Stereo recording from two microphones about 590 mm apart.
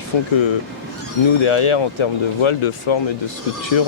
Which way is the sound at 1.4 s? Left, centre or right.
Left.